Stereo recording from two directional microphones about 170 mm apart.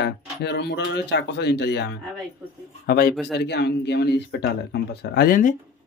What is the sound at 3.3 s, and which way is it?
Speech, 80° left.